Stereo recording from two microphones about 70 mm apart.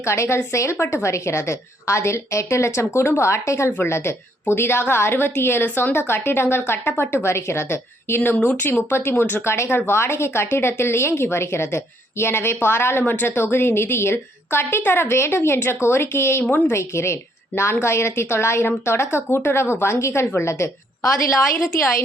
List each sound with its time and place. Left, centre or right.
0.0 s a woman's voice: left